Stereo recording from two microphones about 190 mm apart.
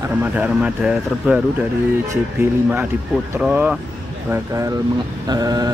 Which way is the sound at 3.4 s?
5° right (ahead or behind).